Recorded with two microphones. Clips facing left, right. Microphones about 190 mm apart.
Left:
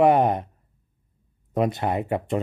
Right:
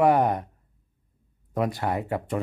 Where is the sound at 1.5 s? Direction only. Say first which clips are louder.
Left 3 dB; 20° left (ahead or behind).